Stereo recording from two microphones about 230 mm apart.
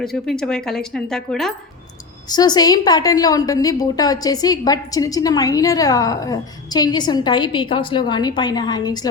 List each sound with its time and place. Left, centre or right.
0.0 s speech: centre
2.3 s a woman's voice: centre